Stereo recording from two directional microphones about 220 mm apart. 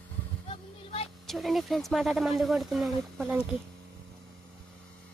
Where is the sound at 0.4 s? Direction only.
25° left (ahead or behind).